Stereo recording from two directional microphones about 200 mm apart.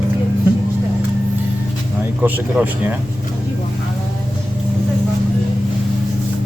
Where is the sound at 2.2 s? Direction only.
5° right (ahead or behind).